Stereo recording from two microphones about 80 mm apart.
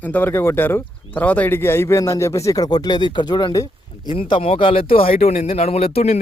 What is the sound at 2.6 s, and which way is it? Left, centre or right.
Speech, left.